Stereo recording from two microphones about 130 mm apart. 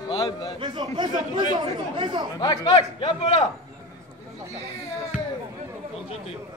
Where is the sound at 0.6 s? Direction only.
35° right (ahead or behind).